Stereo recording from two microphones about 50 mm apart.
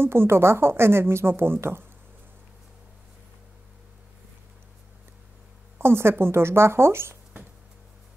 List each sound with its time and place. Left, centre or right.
0.0 s speech: right
5.8 s speech: right